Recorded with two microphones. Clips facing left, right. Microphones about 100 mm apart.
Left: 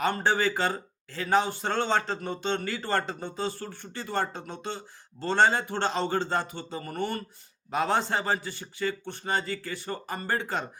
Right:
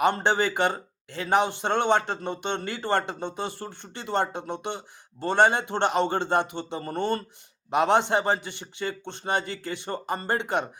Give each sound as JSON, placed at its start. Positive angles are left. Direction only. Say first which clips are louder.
{"t": 0.0, "sound": "a man's voice", "louder": "right 3 dB", "side_deg": -20}